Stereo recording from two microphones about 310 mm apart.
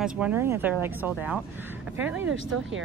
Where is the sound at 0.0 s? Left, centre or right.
Centre.